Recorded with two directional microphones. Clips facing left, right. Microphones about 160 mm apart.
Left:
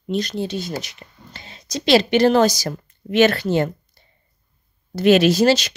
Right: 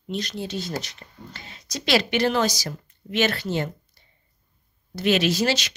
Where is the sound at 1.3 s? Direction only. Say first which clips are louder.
Left 7 dB; 25° left (ahead or behind); by 3.7 s 55° left (ahead or behind).